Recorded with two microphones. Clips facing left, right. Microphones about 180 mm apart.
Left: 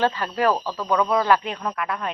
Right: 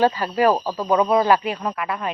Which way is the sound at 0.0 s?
10° right (ahead or behind).